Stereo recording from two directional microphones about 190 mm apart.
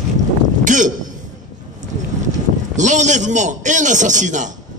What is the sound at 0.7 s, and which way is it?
Speech, 40° right (ahead or behind).